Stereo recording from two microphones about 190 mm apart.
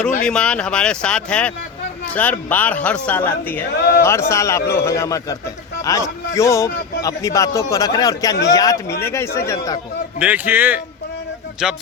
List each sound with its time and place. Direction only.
0.3 s speech: 5° left (ahead or behind)
3.8 s speech: 60° left (ahead or behind)
4.0 s speech: 15° left (ahead or behind)
10.2 s a man's voice: 10° right (ahead or behind)